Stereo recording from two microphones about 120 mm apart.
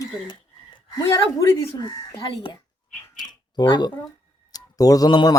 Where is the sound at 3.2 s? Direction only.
35° left (ahead or behind).